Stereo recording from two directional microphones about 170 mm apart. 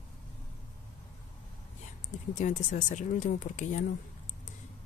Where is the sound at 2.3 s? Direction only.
45° left (ahead or behind).